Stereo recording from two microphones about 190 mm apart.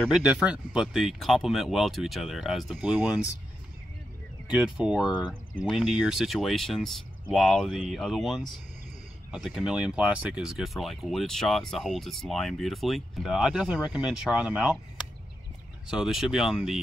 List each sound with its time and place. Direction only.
0.0 s speech: 5° right (ahead or behind)
4.5 s speech: 5° right (ahead or behind)
15.9 s speech: centre (ahead or behind)